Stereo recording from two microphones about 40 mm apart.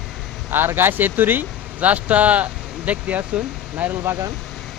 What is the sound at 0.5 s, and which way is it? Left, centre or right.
Speech, right.